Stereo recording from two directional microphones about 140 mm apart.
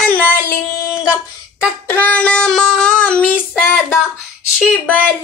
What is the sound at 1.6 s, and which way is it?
Child singing, 15° left (ahead or behind).